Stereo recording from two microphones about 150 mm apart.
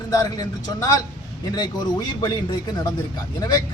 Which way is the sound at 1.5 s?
25° left (ahead or behind).